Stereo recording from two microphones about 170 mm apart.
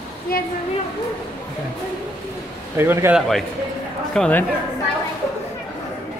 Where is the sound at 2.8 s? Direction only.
15° right (ahead or behind).